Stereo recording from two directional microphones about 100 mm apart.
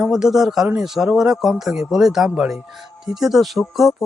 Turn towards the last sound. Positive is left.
turn(degrees=0)  # may be behind; listen again after turning